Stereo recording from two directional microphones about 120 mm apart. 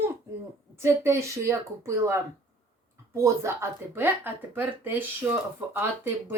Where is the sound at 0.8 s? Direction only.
25° right (ahead or behind).